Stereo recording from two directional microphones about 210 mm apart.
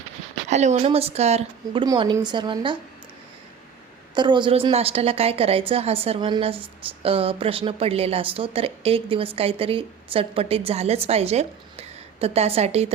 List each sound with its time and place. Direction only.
0.4 s a woman's voice: 35° right (ahead or behind)
4.1 s a woman's voice: 20° right (ahead or behind)